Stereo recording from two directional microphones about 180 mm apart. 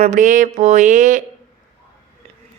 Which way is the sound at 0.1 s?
45° right (ahead or behind).